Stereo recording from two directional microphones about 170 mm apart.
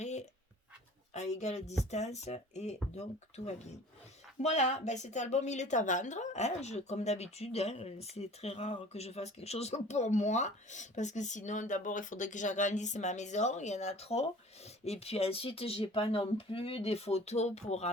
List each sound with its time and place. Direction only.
0.0 s writing: 40° left (ahead or behind)
1.1 s speech: 40° left (ahead or behind)